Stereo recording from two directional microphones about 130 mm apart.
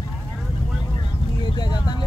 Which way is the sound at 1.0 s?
35° left (ahead or behind).